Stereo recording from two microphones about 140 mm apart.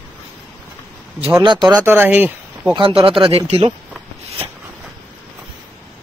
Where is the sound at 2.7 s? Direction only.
40° right (ahead or behind).